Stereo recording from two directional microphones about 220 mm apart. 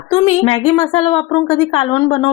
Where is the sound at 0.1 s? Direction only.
25° left (ahead or behind).